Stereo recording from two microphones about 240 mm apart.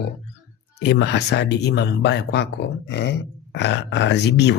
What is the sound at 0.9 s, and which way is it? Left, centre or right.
Speech, left.